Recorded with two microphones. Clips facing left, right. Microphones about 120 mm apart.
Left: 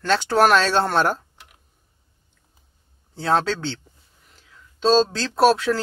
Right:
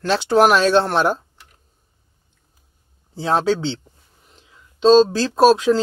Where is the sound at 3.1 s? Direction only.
15° right (ahead or behind).